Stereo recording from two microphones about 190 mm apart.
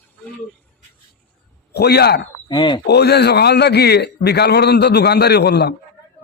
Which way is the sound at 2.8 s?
60° left (ahead or behind).